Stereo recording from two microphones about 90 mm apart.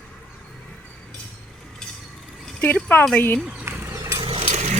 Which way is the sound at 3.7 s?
25° right (ahead or behind).